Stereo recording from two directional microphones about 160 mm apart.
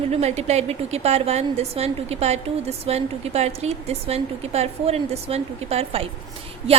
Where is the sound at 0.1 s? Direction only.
40° right (ahead or behind).